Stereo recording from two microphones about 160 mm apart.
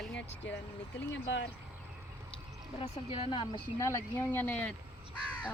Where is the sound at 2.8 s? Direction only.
35° left (ahead or behind).